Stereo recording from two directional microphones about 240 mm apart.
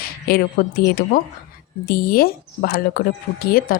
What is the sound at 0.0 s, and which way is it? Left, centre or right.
A woman's voice, left.